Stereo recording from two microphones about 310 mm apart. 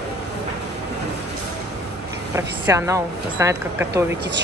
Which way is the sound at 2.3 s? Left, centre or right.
Centre.